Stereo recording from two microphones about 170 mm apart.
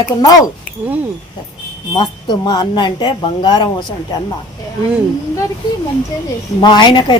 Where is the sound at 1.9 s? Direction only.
25° left (ahead or behind).